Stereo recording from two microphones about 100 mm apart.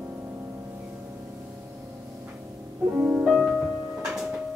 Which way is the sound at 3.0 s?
5° right (ahead or behind).